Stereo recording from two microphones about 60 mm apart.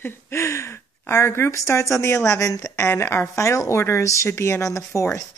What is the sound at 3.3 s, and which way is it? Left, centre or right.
Speech, left.